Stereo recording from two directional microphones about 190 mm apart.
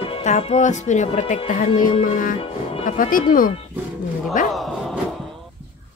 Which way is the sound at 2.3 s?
30° left (ahead or behind).